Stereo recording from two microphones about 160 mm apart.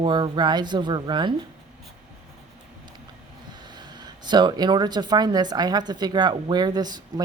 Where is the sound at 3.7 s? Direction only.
25° right (ahead or behind).